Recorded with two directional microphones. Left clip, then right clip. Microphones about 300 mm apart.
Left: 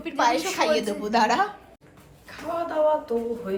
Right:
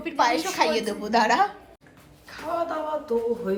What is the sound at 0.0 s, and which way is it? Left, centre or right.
A woman's voice, centre.